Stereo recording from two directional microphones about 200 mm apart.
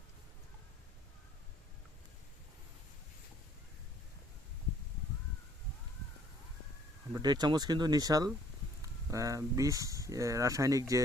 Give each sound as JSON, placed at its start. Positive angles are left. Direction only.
{"t": 7.1, "sound": "speech", "side_deg": -20}